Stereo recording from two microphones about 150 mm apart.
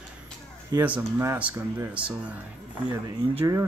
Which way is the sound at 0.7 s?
25° right (ahead or behind).